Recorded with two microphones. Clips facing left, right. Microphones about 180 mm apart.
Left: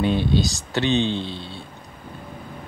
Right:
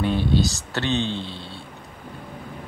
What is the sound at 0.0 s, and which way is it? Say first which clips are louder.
Speech: left 1 dB; 15° left (ahead or behind).